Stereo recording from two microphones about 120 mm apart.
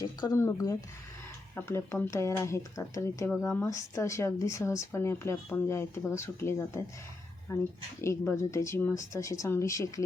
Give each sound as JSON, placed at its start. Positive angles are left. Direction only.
{"t": 0.0, "sound": "speech", "side_deg": 30}